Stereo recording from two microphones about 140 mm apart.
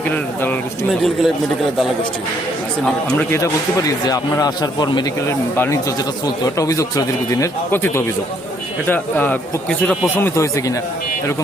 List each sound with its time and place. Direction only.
0.9 s a man's voice: centre (ahead or behind)
2.8 s speech: 5° left (ahead or behind)
3.3 s speech: 20° left (ahead or behind)
5.5 s speech: 20° left (ahead or behind)
10.2 s speech: 20° left (ahead or behind)